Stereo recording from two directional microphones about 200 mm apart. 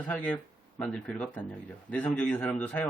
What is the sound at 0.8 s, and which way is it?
A man's voice, 5° left (ahead or behind).